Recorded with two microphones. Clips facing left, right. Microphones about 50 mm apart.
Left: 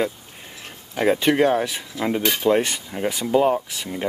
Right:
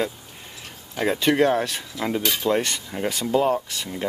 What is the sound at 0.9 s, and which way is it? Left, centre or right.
Speech, centre.